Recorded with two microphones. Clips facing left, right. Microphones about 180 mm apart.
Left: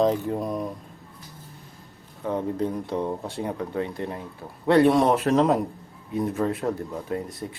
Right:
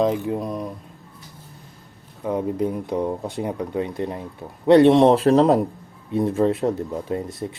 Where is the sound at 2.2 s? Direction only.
10° right (ahead or behind).